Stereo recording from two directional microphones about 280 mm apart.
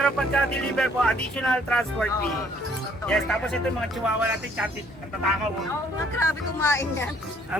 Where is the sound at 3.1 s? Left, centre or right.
Centre.